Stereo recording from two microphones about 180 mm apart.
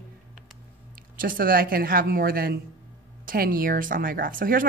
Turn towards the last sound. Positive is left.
turn(degrees=-50)  # may be behind; listen again after turning